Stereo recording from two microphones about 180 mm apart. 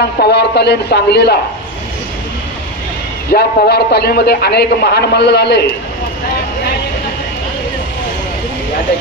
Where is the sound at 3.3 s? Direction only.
60° left (ahead or behind).